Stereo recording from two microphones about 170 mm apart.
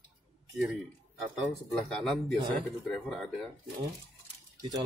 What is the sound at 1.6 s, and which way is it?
Speech, centre (ahead or behind).